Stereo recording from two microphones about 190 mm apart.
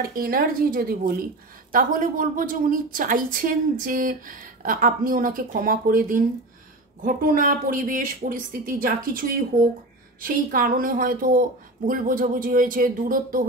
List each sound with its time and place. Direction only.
0.0 s a woman's voice: 50° right (ahead or behind)
10.2 s a woman's voice: 50° right (ahead or behind)